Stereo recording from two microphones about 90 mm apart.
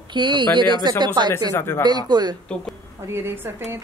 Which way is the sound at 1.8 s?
50° right (ahead or behind).